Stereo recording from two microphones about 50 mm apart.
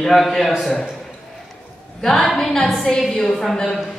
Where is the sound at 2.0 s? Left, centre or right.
Centre.